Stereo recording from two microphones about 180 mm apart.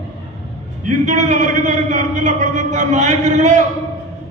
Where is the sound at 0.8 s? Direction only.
45° right (ahead or behind).